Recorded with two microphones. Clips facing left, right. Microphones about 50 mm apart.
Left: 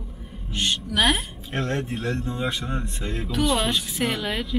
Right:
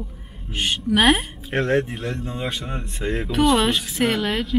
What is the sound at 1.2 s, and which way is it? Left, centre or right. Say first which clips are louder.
Speech: right 5 dB; centre.